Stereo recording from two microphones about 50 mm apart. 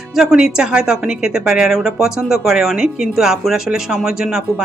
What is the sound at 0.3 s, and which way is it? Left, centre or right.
A woman's voice, centre.